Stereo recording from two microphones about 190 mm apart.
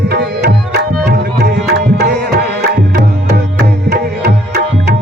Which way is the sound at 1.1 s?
60° right (ahead or behind).